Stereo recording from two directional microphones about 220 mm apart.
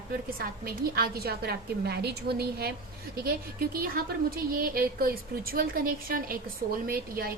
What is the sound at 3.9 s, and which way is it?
A woman's voice, 40° right (ahead or behind).